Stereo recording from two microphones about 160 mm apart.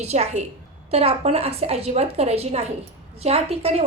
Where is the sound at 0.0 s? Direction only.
40° right (ahead or behind).